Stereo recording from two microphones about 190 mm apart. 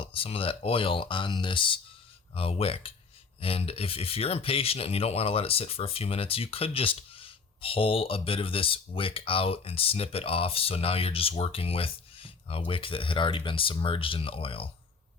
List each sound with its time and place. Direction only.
0.0 s speech: 30° left (ahead or behind)